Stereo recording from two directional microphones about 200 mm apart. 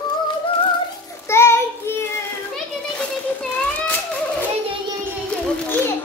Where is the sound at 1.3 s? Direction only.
15° left (ahead or behind).